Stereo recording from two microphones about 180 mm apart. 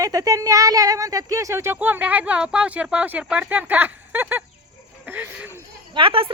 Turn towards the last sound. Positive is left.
turn(degrees=-30)  # may be behind; listen again after turning